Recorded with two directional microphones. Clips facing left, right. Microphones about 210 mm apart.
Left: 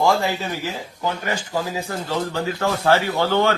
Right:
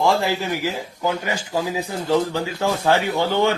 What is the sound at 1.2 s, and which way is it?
Speech, 15° right (ahead or behind).